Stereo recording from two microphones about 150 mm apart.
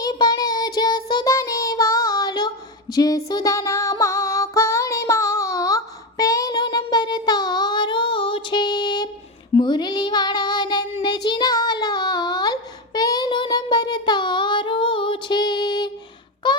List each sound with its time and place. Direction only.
0.0 s child singing: 25° left (ahead or behind)
2.9 s female singing: 25° left (ahead or behind)
9.6 s music: 30° left (ahead or behind)
11.0 s child singing: 30° left (ahead or behind)
16.4 s a sound: 30° left (ahead or behind)